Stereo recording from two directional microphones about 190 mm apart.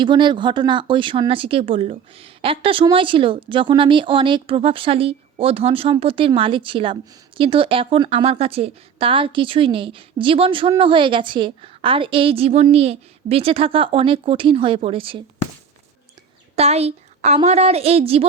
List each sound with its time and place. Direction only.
0.0 s speech: 25° right (ahead or behind)
16.6 s a woman's voice: 35° right (ahead or behind)